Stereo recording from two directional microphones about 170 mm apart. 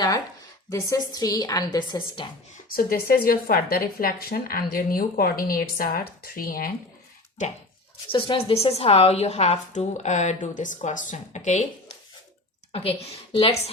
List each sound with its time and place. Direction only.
0.7 s a woman's voice: 20° left (ahead or behind)
2.7 s speech: 60° left (ahead or behind)
7.4 s a woman's voice: 45° left (ahead or behind)
8.3 s a woman's voice: 35° left (ahead or behind)
12.7 s a woman's voice: 35° left (ahead or behind)